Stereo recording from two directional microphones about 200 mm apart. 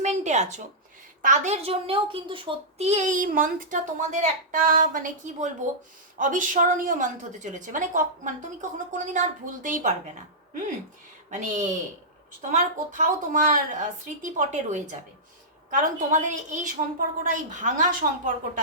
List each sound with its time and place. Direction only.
0.0 s a sound: 35° right (ahead or behind)
1.2 s a child's voice: 35° right (ahead or behind)
11.3 s a child's voice: 40° right (ahead or behind)